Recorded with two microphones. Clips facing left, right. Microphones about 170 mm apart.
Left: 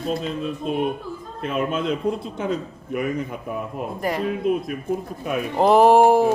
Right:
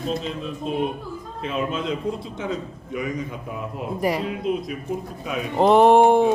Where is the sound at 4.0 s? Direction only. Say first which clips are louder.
Right 2 dB; 5° right (ahead or behind).